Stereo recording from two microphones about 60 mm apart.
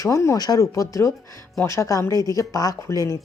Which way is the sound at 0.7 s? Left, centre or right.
Left.